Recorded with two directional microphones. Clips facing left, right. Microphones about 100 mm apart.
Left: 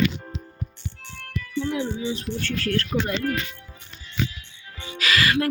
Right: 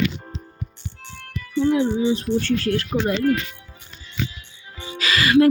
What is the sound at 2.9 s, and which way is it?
Speech, 15° right (ahead or behind).